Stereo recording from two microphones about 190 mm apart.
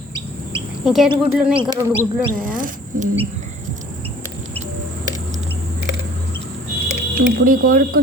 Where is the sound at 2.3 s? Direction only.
45° right (ahead or behind).